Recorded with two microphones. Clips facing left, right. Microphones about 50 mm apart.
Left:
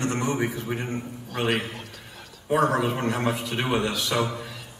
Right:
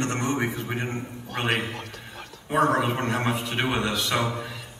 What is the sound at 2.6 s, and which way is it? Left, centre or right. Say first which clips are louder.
A man's voice: right 2 dB; right.